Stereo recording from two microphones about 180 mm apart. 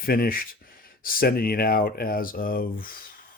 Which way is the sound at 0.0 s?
55° left (ahead or behind).